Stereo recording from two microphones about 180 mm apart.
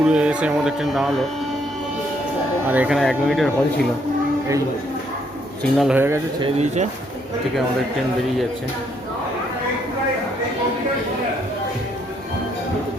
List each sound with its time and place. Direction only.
0.0 s speech: 5° right (ahead or behind)
2.6 s speech: 10° right (ahead or behind)
5.7 s speech: centre (ahead or behind)
6.4 s speech: 40° right (ahead or behind)